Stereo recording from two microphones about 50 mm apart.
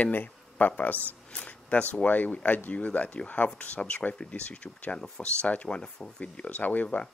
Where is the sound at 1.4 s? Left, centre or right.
Left.